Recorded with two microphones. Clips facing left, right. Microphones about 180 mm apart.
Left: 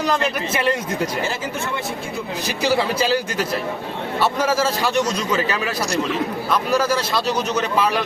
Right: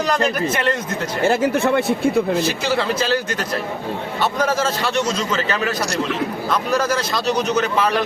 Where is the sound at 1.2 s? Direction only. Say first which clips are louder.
Right 9 dB; 60° right (ahead or behind).